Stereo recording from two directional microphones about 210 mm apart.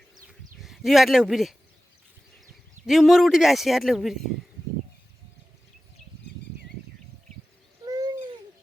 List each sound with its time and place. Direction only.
0.3 s a sound: centre (ahead or behind)
2.8 s speech: centre (ahead or behind)
7.9 s bird: 20° right (ahead or behind)